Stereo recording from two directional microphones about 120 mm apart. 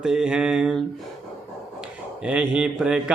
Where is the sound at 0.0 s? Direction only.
5° right (ahead or behind).